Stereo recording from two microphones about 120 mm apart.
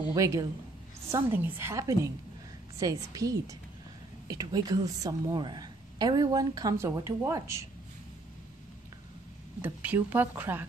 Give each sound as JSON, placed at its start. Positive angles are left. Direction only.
{"t": 0.1, "sound": "a woman's voice", "side_deg": -25}
{"t": 9.6, "sound": "speech", "side_deg": -15}